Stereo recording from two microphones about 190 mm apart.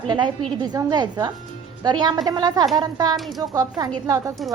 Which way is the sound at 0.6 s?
20° right (ahead or behind).